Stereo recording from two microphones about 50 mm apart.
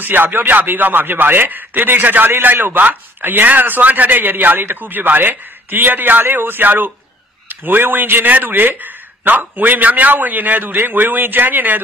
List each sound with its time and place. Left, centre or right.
0.0 s a man's voice: right